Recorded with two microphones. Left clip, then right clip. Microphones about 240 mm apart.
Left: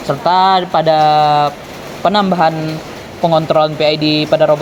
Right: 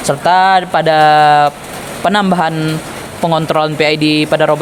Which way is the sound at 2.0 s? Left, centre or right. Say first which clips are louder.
Left 1 dB; right.